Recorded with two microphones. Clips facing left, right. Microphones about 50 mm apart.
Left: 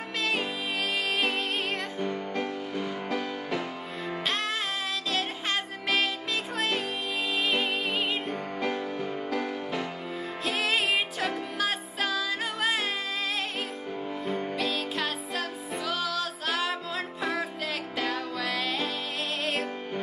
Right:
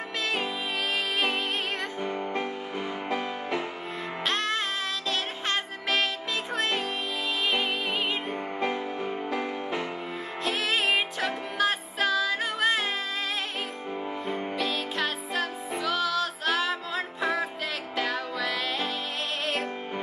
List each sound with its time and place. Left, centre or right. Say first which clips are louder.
1.1 s music: right 1 dB; centre
2.0 s music: right 1 dB; right
4.3 s music: right 3 dB; centre
8.5 s music: right 1 dB; centre
10.4 s music: right 1 dB; centre
14.5 s music: even; centre